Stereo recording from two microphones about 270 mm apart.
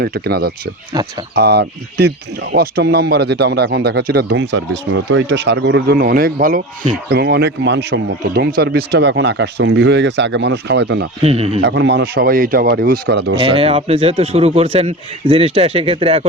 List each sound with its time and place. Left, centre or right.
0.0 s speech: right
0.9 s speech: centre
1.4 s speech: right
11.2 s speech: right
11.6 s speech: right
13.3 s speech: right